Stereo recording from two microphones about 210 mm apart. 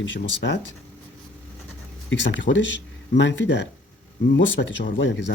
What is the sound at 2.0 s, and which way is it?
Speech, 60° left (ahead or behind).